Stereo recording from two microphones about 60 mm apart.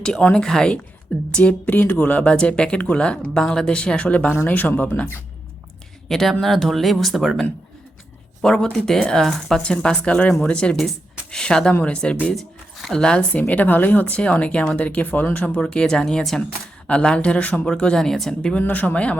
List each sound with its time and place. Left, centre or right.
0.0 s speech: centre; by 4.7 s left
6.1 s speech: centre
8.4 s speech: centre
9.6 s speech: centre
11.7 s speech: left
12.3 s speech: centre
13.5 s speech: left; by 18.5 s centre
18.6 s speech: left